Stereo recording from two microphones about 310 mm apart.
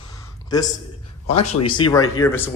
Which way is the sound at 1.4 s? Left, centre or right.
Centre.